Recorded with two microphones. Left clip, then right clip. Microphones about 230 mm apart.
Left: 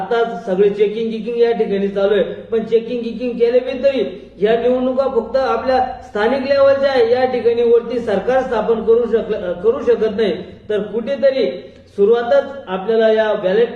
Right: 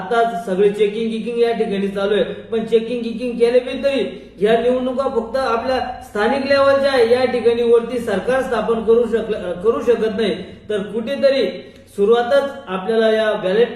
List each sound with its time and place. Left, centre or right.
0.1 s speech: centre